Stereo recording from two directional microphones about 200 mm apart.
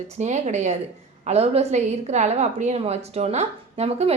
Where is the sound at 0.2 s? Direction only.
35° right (ahead or behind).